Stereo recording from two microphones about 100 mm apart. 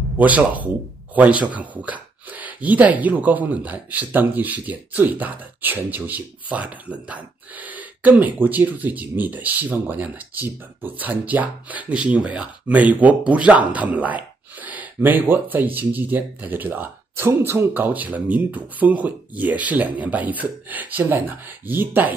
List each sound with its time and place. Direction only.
0.2 s speech: 15° right (ahead or behind)